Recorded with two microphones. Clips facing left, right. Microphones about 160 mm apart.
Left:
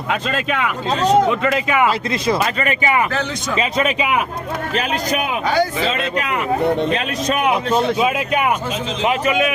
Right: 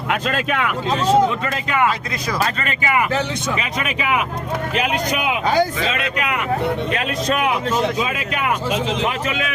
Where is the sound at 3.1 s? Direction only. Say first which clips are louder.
Right 1 dB; 20° right (ahead or behind).